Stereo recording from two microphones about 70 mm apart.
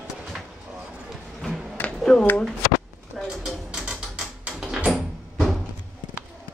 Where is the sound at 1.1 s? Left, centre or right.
Centre.